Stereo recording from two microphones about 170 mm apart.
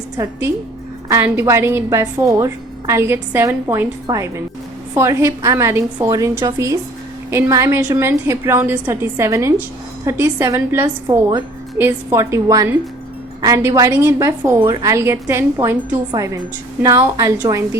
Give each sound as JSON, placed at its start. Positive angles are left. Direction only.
{"t": 0.2, "sound": "a woman's voice", "side_deg": -15}